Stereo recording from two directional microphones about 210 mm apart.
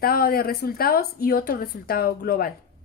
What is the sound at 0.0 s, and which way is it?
Speech, 45° left (ahead or behind).